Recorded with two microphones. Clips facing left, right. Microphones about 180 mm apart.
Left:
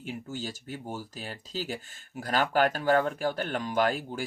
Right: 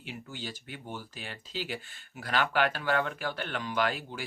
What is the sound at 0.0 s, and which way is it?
Speech, 45° left (ahead or behind).